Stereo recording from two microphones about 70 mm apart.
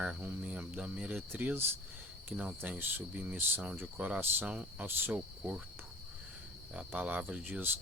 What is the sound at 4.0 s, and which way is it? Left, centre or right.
Speech, centre.